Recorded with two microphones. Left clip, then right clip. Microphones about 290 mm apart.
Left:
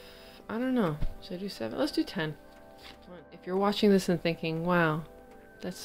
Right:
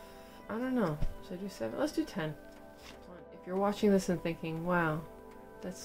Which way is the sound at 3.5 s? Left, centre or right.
Left.